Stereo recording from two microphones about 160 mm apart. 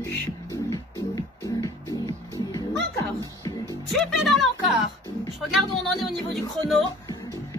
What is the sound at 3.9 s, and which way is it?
Music, centre (ahead or behind).